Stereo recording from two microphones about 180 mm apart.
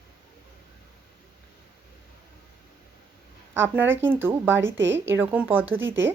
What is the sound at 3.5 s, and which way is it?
Speech, 10° right (ahead or behind).